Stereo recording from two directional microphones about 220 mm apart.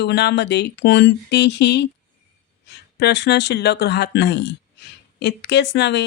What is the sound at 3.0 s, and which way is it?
Speech, 50° left (ahead or behind).